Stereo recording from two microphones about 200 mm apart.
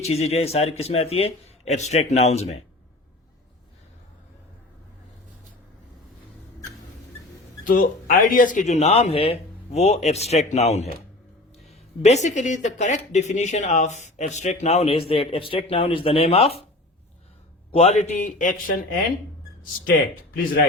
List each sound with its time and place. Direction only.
0.0 s speech: 30° left (ahead or behind)
7.6 s speech: 40° left (ahead or behind)
17.7 s speech: 30° left (ahead or behind); by 20.6 s 45° left (ahead or behind)